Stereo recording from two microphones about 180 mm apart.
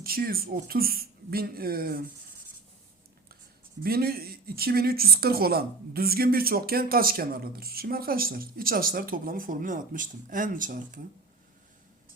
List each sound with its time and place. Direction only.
0.0 s speech: 55° right (ahead or behind)
3.8 s speech: 55° right (ahead or behind)